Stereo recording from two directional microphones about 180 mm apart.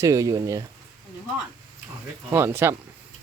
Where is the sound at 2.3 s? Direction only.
15° right (ahead or behind).